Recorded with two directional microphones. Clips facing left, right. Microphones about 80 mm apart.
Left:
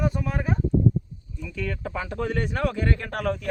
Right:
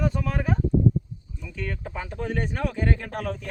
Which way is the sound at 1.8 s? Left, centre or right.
Left.